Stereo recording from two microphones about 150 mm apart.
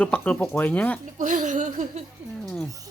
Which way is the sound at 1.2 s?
60° right (ahead or behind).